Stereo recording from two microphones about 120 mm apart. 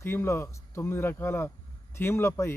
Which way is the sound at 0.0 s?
20° left (ahead or behind).